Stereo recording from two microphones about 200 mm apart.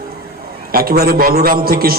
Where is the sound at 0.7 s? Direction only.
50° right (ahead or behind).